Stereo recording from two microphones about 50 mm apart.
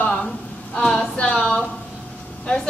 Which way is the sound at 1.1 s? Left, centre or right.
Left.